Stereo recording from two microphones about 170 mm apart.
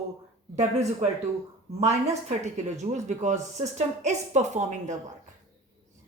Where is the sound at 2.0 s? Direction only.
40° right (ahead or behind).